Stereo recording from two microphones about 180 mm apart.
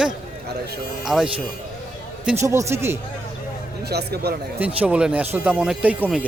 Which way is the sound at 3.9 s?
65° right (ahead or behind).